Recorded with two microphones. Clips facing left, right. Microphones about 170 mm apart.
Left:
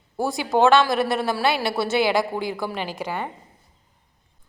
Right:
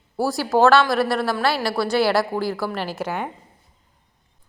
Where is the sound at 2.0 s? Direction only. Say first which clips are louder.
Right 2 dB; 15° left (ahead or behind).